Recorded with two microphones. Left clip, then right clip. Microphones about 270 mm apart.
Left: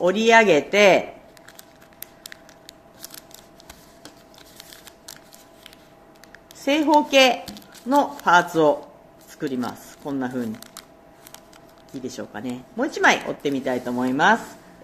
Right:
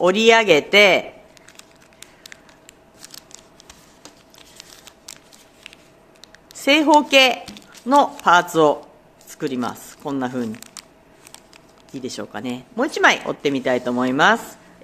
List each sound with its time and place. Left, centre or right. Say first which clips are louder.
0.0 s a man's voice: right 2 dB; right
4.6 s a sound: right 1 dB; centre
6.6 s speech: right 4 dB; right
7.4 s squish: even; centre
7.9 s a man's voice: right 3 dB; right
10.6 s shuffling cards: right 2 dB; centre
12.0 s speech: right 3 dB; right